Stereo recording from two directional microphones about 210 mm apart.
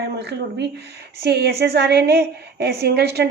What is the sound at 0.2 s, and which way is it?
A woman's voice, 55° right (ahead or behind).